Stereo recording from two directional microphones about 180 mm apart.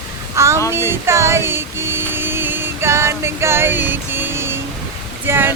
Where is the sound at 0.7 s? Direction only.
15° right (ahead or behind).